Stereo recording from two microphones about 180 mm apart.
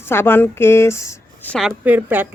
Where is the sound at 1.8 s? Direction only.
10° right (ahead or behind).